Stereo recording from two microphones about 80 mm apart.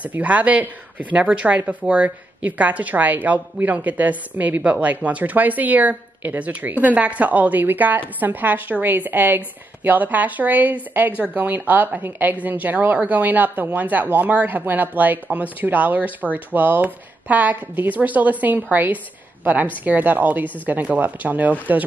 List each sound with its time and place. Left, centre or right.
0.0 s a woman's voice: centre